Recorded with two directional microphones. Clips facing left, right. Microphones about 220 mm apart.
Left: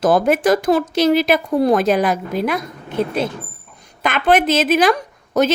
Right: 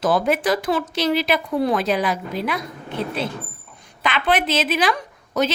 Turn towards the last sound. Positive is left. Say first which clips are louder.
# left 5 dB
turn(degrees=45)  # may be behind; listen again after turning